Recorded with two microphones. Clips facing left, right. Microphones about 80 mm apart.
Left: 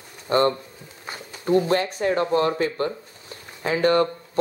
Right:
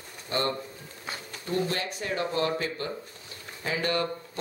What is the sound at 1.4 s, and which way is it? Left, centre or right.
Speech, left.